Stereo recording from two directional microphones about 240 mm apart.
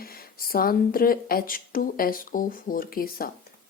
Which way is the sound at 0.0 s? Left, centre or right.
Left.